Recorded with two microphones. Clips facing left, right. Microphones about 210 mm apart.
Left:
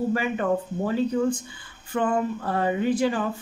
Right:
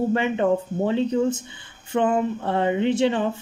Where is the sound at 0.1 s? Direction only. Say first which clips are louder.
Right 3 dB; 25° right (ahead or behind).